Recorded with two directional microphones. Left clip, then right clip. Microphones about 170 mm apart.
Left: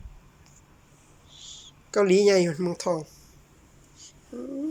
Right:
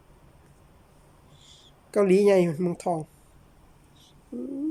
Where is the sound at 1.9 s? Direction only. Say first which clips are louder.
Even; 30° right (ahead or behind).